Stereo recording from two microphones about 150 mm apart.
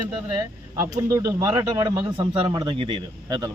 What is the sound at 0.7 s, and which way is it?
A man's voice, 20° right (ahead or behind).